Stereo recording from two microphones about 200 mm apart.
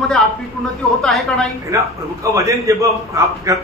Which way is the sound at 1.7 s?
15° right (ahead or behind).